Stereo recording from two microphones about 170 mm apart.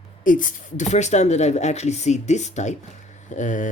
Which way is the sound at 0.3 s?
50° left (ahead or behind).